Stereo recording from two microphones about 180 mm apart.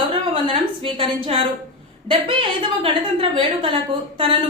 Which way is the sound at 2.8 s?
30° right (ahead or behind).